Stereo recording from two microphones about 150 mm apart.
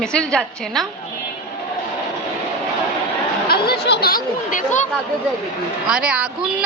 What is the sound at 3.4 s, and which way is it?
Chatter, 90° left.